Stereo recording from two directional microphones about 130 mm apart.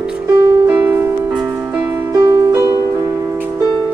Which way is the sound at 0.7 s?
15° right (ahead or behind).